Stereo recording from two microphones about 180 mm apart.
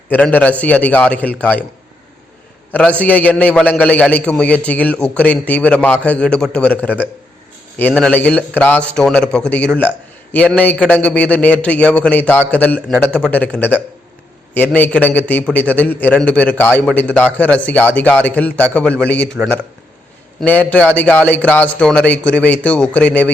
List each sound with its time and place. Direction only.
0.1 s a man's voice: 10° left (ahead or behind)
3.0 s a man's voice: 10° left (ahead or behind)
20.4 s a man's voice: 10° left (ahead or behind)